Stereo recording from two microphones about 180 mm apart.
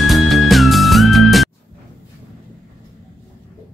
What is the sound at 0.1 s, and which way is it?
Music, centre (ahead or behind).